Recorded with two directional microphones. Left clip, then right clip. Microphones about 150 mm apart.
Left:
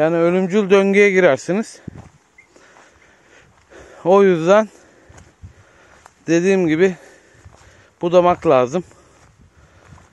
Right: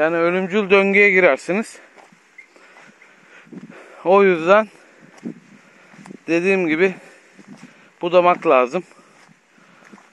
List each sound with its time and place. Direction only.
0.0 s speech: 55° left (ahead or behind); by 1.9 s 35° left (ahead or behind)
3.3 s a sound: 45° left (ahead or behind)
6.2 s speech: 45° left (ahead or behind)